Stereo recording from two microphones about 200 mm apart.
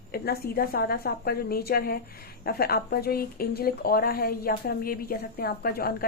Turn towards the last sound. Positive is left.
turn(degrees=50)  # may be behind; listen again after turning